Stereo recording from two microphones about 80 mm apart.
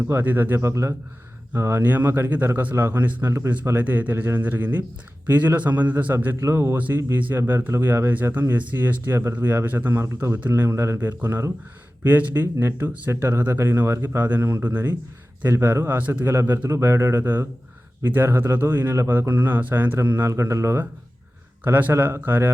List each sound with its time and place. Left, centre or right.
0.1 s speech: right
3.7 s speech: right
6.4 s speech: right
21.6 s speech: right